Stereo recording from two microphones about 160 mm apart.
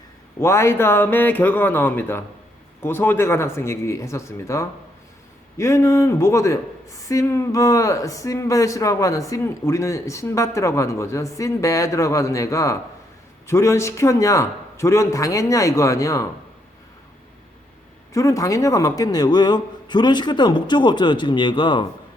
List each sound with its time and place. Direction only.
0.3 s speech: 15° left (ahead or behind)
18.1 s speech: 20° left (ahead or behind)